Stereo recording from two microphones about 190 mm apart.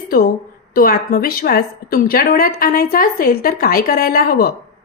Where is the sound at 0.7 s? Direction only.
50° left (ahead or behind).